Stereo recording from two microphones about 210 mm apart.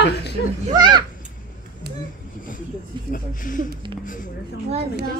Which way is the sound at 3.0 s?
40° left (ahead or behind).